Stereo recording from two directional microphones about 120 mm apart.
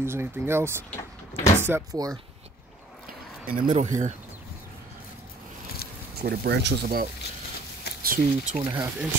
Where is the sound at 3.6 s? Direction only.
90° right.